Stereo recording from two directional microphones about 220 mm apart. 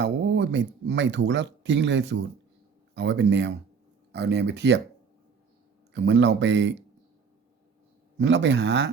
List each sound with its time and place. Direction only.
0.0 s speech: 50° right (ahead or behind)
5.9 s speech: 55° right (ahead or behind)
8.2 s speech: 55° right (ahead or behind)